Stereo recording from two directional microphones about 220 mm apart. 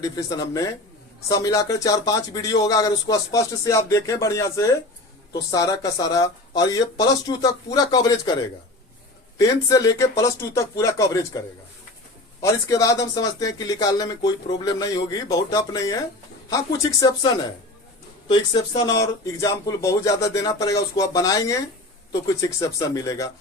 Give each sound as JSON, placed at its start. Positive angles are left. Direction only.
{"t": 0.0, "sound": "speech", "side_deg": 15}
{"t": 9.4, "sound": "speech", "side_deg": 15}
{"t": 12.4, "sound": "speech", "side_deg": 15}
{"t": 18.3, "sound": "speech", "side_deg": 20}